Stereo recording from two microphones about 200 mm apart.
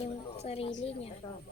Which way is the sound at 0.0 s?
30° left (ahead or behind).